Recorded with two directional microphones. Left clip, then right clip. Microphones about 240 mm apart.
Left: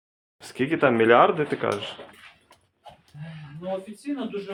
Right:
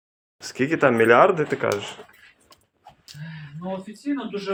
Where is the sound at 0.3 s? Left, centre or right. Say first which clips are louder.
Right 2 dB; centre.